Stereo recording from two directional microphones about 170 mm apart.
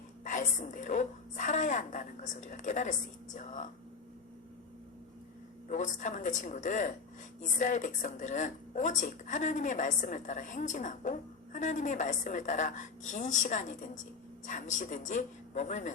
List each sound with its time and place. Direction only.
0.3 s speech: 50° left (ahead or behind)
5.6 s speech: 45° left (ahead or behind)